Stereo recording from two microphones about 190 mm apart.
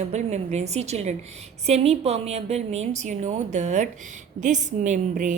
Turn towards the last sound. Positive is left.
turn(degrees=-40)  # may be behind; listen again after turning